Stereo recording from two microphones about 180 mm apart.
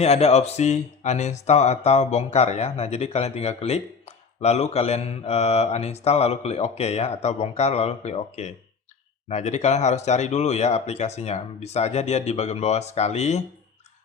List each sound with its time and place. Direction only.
0.0 s speech: 35° left (ahead or behind)